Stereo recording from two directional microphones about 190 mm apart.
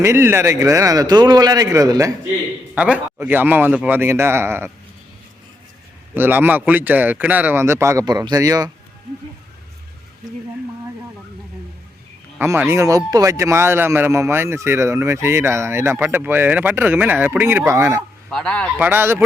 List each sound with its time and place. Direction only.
0.0 s speech: 15° right (ahead or behind)
2.7 s speech: 5° right (ahead or behind)
6.1 s speech: 10° right (ahead or behind)
12.4 s speech: 15° right (ahead or behind)
18.3 s speech: 5° left (ahead or behind)
18.8 s speech: 10° right (ahead or behind)